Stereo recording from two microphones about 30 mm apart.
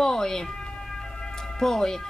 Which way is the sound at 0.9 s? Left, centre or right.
Centre.